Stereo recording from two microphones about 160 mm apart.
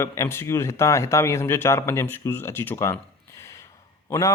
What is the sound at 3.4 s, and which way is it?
Gasp, 20° left (ahead or behind).